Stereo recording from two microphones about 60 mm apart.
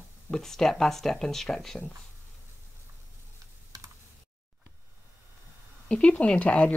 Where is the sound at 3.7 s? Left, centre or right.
Right.